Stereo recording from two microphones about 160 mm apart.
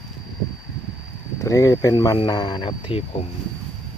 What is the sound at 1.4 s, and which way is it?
Speech, 20° left (ahead or behind).